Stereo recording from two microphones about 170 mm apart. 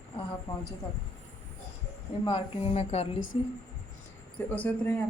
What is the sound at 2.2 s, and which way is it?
Speech, 30° left (ahead or behind).